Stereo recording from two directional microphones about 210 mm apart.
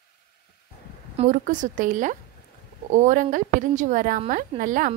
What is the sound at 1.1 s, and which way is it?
Speech, 35° right (ahead or behind).